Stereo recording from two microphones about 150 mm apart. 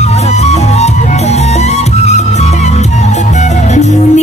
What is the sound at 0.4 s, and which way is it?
Music, 50° left (ahead or behind).